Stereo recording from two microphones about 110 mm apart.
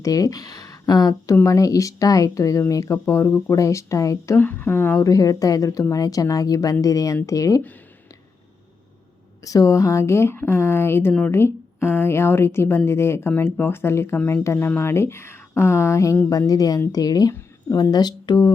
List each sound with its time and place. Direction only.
0.0 s a woman's voice: 30° left (ahead or behind)
9.4 s a woman's voice: 30° left (ahead or behind)